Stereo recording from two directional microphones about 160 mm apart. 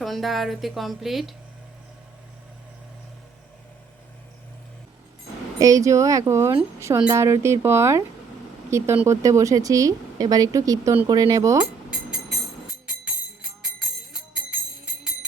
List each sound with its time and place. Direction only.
0.0 s speech: centre (ahead or behind)
5.5 s speech: 20° right (ahead or behind)